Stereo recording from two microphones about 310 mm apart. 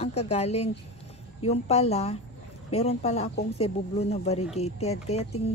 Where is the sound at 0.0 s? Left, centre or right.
Centre.